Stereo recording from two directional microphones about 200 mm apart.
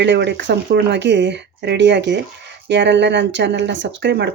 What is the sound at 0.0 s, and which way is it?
Speech, 60° right (ahead or behind).